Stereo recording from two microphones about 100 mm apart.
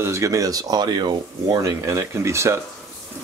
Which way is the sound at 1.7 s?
30° right (ahead or behind).